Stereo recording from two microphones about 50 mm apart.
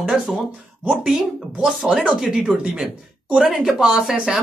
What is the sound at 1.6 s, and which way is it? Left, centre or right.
Speech, centre.